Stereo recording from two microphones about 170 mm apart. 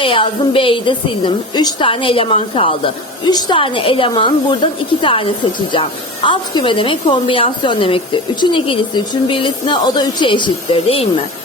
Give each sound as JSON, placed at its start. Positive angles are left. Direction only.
{"t": 0.0, "sound": "a woman's voice", "side_deg": 30}